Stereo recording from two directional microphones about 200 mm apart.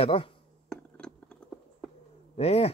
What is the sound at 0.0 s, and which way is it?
Speech, 30° left (ahead or behind).